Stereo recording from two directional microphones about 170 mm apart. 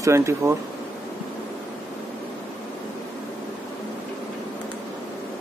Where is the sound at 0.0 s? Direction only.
15° right (ahead or behind).